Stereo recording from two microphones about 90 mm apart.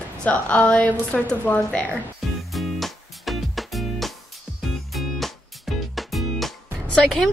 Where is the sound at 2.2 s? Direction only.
Centre (ahead or behind).